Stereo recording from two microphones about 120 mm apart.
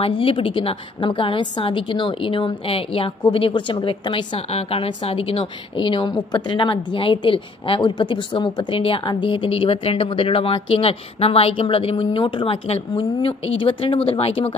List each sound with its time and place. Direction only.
0.0 s a woman's voice: 50° left (ahead or behind)